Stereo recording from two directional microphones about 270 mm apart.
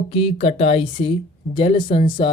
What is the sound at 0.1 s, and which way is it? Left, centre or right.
Speech, centre.